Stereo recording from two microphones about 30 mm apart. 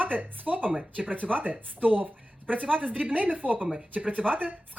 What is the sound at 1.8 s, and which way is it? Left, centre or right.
Speech, right.